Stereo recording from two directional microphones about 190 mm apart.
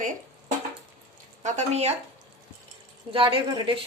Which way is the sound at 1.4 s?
35° right (ahead or behind).